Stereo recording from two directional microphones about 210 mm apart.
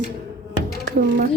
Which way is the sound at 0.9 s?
45° right (ahead or behind).